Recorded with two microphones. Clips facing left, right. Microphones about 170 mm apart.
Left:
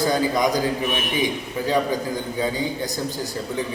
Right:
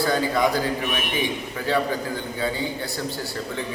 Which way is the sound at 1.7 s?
15° left (ahead or behind).